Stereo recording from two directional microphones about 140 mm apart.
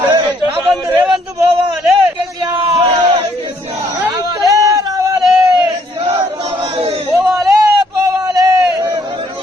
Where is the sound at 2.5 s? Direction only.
35° right (ahead or behind).